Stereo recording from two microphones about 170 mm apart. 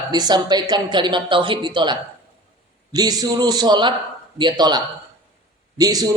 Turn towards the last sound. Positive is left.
turn(degrees=-20)  # may be behind; listen again after turning